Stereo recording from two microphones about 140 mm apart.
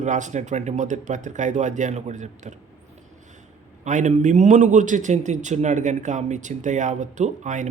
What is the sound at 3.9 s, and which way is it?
A man's voice, 60° right (ahead or behind).